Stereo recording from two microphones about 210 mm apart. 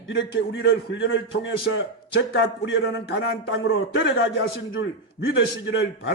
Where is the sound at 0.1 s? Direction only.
60° left (ahead or behind).